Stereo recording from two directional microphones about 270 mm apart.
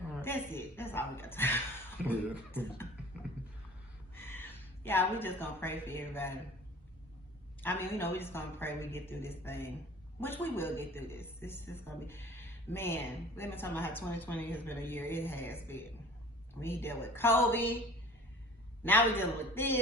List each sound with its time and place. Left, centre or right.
0.2 s a man's voice: centre
2.0 s beatboxing: centre
2.5 s a man's voice: centre
4.1 s a woman's voice: centre
7.6 s a man's voice: centre
18.8 s a man's voice: centre